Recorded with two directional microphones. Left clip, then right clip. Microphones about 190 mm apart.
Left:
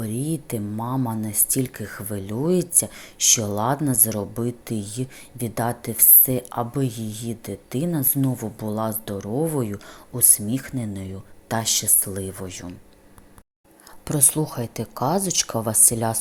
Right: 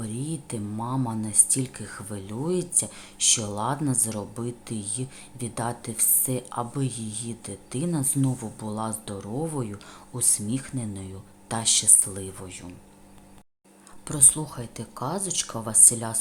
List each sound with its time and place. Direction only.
0.0 s speech: 20° left (ahead or behind)
14.0 s speech: 20° left (ahead or behind)